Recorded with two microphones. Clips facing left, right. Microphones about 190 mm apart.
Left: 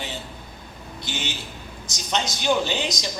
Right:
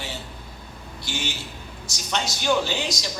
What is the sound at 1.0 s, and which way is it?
A man's voice, 20° left (ahead or behind).